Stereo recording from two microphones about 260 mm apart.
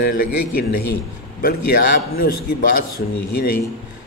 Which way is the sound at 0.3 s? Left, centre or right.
Left.